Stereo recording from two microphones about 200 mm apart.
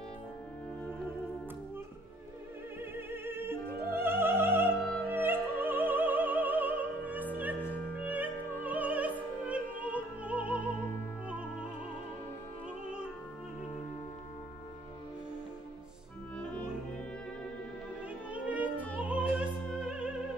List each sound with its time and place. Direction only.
2.8 s opera: 10° right (ahead or behind)
4.8 s music: 5° left (ahead or behind)
5.1 s opera: 10° right (ahead or behind)
7.9 s music: 10° right (ahead or behind)
9.5 s opera: 5° right (ahead or behind)
18.3 s music: 5° right (ahead or behind)
18.9 s opera: 5° right (ahead or behind)